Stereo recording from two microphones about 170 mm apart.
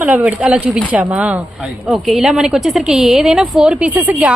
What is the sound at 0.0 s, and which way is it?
A woman's voice, 10° right (ahead or behind).